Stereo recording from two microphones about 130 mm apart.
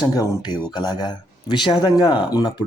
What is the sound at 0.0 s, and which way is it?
Speech, 30° left (ahead or behind).